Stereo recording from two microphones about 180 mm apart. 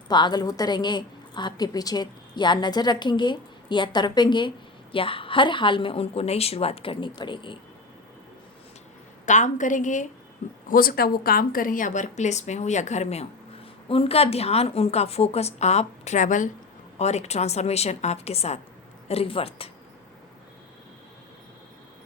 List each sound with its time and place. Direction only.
0.1 s a woman's voice: 25° left (ahead or behind)
9.2 s a woman's voice: 40° left (ahead or behind)
10.7 s a woman's voice: 55° left (ahead or behind); by 19.7 s 35° left (ahead or behind)